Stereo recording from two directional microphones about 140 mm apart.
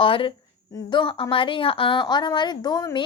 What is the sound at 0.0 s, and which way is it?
A woman's voice, 40° left (ahead or behind).